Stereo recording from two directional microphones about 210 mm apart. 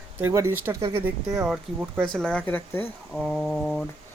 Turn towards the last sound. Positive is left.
turn(degrees=0)  # may be behind; listen again after turning